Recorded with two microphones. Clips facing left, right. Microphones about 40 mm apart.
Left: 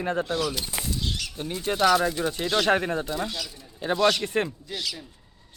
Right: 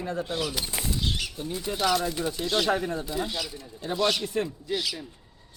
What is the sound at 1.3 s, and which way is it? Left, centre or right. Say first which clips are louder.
Speech: left 3 dB; left.